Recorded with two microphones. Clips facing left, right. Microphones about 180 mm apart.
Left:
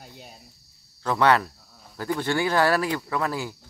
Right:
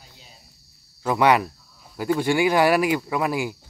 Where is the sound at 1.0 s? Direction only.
10° right (ahead or behind).